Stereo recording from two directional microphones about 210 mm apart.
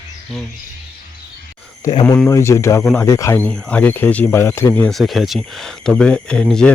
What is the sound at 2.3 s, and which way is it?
Speech, 15° left (ahead or behind).